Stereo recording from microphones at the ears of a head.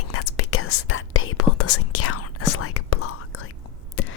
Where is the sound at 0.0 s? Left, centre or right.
Left.